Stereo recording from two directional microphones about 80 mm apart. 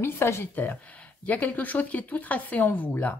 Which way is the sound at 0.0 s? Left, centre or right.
Left.